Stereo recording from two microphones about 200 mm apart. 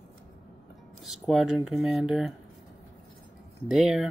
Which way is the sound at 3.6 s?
Centre (ahead or behind).